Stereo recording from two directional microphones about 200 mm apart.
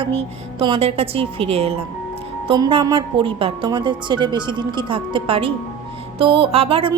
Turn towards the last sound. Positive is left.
turn(degrees=-25)  # may be behind; listen again after turning